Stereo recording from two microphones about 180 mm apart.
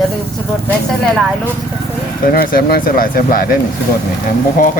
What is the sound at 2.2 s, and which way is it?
Speech, 55° left (ahead or behind).